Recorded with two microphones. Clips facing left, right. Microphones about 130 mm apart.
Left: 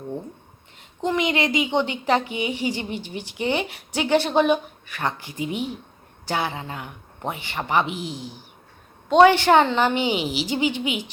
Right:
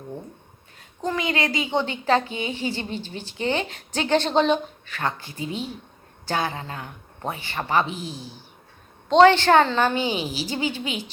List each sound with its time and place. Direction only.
0.8 s a woman's voice: 20° left (ahead or behind)